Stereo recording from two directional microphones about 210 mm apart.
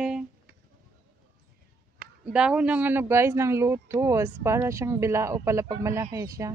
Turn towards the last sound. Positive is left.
turn(degrees=-15)  # may be behind; listen again after turning